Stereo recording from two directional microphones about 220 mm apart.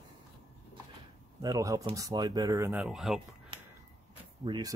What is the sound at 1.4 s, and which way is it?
Speech, 15° right (ahead or behind).